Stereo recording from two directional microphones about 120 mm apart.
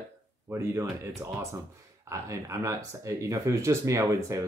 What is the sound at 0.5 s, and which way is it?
Speech, 25° right (ahead or behind).